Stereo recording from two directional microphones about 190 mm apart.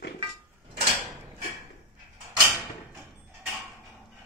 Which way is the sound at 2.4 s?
15° right (ahead or behind).